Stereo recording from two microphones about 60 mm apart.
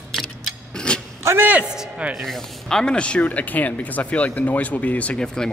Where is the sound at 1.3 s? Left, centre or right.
Right.